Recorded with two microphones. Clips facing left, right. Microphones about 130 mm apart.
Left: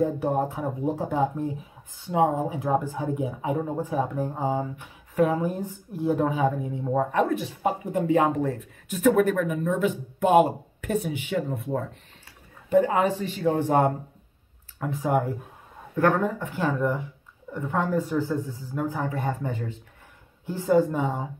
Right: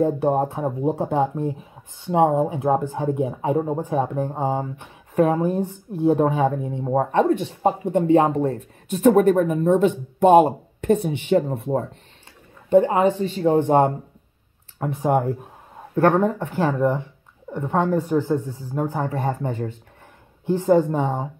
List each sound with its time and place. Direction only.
0.2 s speech: 30° right (ahead or behind)
4.4 s speech: 45° right (ahead or behind)
5.6 s speech: 20° right (ahead or behind)
6.1 s speech: 35° right (ahead or behind)
14.8 s speech: 35° right (ahead or behind)
16.0 s speech: 30° right (ahead or behind)
17.5 s a woman's voice: 25° right (ahead or behind)
17.8 s speech: 45° right (ahead or behind)